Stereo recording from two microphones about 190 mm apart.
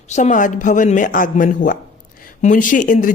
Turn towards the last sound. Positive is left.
turn(degrees=45)  # may be behind; listen again after turning